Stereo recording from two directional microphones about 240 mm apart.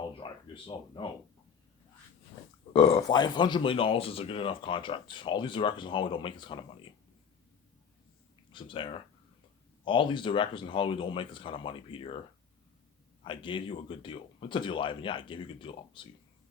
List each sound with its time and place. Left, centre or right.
0.2 s speech: left
2.7 s speech: left
8.5 s speech: left
13.2 s speech: left